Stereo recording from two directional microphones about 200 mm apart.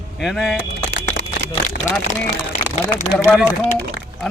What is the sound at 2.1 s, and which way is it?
Speech, 40° left (ahead or behind).